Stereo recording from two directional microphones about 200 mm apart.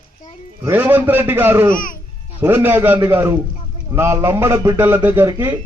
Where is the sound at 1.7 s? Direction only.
45° left (ahead or behind).